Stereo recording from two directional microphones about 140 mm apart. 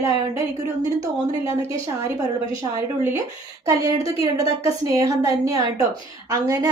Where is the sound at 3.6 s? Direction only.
25° right (ahead or behind).